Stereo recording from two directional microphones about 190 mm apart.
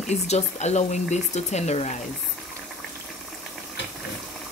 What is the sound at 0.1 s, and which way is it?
Speech, 35° left (ahead or behind).